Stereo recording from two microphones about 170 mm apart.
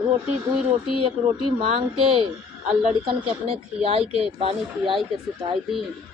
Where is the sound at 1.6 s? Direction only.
35° right (ahead or behind).